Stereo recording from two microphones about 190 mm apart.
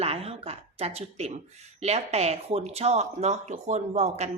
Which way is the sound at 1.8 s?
35° right (ahead or behind).